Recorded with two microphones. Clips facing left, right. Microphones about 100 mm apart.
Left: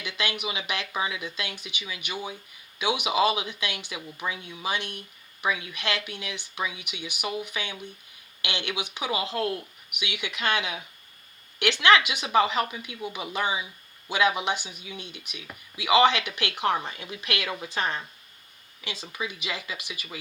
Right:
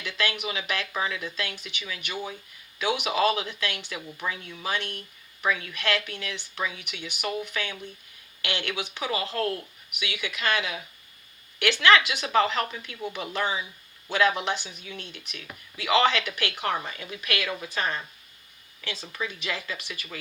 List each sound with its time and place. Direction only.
0.0 s speech: 15° left (ahead or behind)